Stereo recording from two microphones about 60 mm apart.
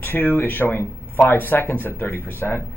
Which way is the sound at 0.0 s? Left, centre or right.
Left.